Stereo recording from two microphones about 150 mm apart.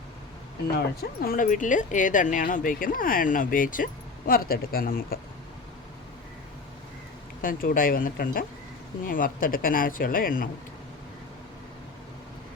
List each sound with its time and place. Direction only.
0.8 s speech: 85° left; by 3.8 s 65° left (ahead or behind)
4.3 s speech: 85° left
7.4 s speech: 70° left (ahead or behind)